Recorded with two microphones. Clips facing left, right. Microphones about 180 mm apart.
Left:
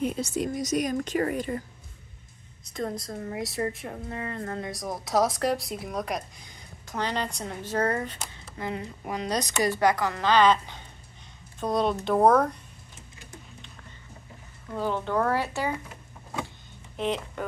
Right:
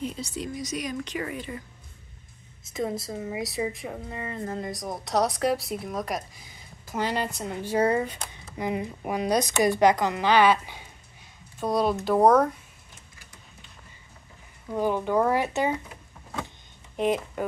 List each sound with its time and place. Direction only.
0.0 s a woman's voice: 55° left (ahead or behind)
2.7 s a woman's voice: 5° right (ahead or behind)
14.7 s speech: 15° right (ahead or behind)
17.0 s speech: 10° right (ahead or behind)